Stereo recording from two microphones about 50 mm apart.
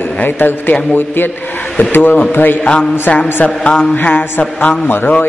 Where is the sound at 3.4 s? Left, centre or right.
Left.